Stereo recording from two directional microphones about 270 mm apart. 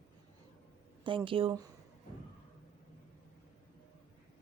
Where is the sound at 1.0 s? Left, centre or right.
Centre.